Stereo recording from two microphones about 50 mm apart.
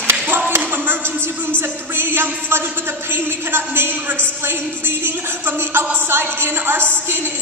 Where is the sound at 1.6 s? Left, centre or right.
Right.